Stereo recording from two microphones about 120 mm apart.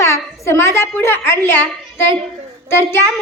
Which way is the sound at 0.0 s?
25° left (ahead or behind).